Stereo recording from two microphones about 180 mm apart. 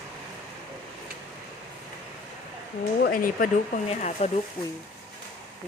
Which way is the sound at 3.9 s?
40° left (ahead or behind).